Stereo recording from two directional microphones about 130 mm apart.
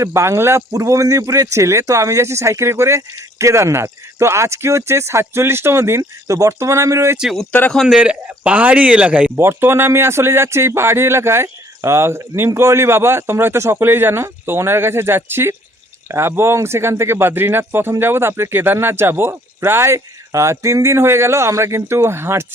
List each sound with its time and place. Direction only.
0.0 s a man's voice: 20° right (ahead or behind)
7.2 s a man's voice: centre (ahead or behind); by 22.4 s 20° right (ahead or behind)